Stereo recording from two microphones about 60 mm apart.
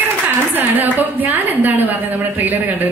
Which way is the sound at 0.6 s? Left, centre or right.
Right.